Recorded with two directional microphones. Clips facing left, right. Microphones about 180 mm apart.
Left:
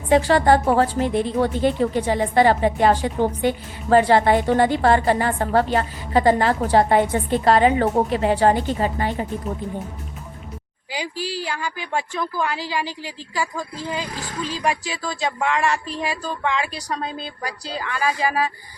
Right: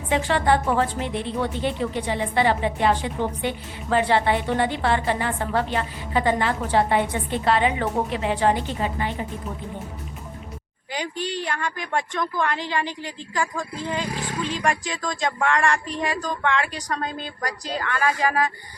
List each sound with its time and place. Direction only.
0.1 s a woman's voice: 40° left (ahead or behind)
10.9 s a woman's voice: 5° left (ahead or behind)